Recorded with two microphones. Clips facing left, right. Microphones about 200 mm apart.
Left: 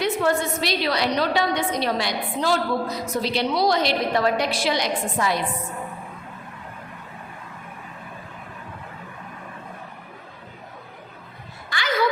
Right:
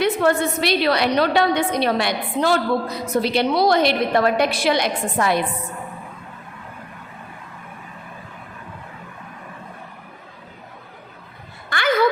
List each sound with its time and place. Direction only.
0.0 s a woman's voice: 60° right (ahead or behind)